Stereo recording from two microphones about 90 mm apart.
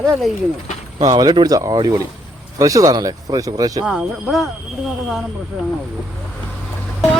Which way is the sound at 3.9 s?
5° right (ahead or behind).